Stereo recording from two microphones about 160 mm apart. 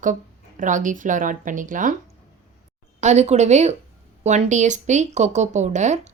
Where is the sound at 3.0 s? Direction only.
45° right (ahead or behind).